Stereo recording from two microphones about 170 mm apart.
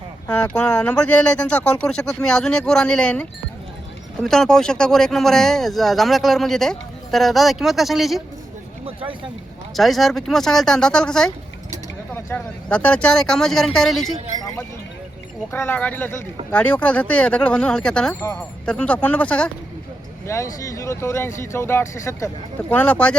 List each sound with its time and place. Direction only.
0.3 s speech: 5° left (ahead or behind)
9.7 s speech: centre (ahead or behind)
15.5 s speech: 10° left (ahead or behind)